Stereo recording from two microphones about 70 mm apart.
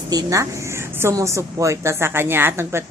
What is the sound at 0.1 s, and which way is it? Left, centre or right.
Speech, right.